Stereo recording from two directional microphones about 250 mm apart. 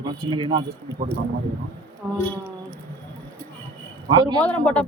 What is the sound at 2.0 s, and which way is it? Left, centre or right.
Speech, centre.